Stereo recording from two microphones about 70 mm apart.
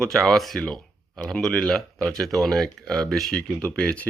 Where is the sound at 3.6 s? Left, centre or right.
Centre.